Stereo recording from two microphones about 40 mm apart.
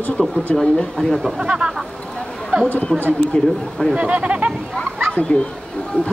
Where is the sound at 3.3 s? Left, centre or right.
Left.